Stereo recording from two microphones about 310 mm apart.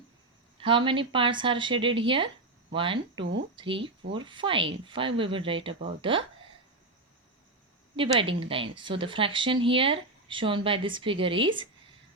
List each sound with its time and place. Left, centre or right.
0.6 s a woman's voice: centre
7.9 s a woman's voice: centre